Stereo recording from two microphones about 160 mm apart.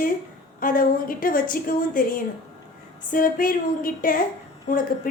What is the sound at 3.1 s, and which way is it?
A woman's voice, 60° left (ahead or behind).